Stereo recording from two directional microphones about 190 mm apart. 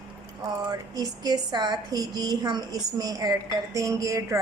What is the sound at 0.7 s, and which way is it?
A woman's voice, 20° right (ahead or behind).